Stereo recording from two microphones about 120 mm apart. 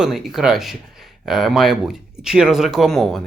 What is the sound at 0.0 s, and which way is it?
Speech, 5° right (ahead or behind).